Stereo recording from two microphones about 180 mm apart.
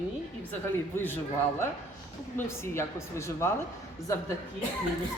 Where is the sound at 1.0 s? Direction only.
10° left (ahead or behind).